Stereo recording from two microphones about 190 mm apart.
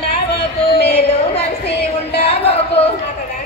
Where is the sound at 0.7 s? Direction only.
60° left (ahead or behind).